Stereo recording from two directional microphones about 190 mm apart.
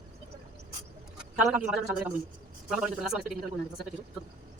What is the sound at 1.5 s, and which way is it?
A man's voice, 5° right (ahead or behind).